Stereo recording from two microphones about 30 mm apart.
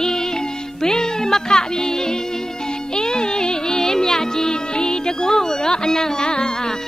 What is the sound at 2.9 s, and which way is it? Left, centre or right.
Music, left.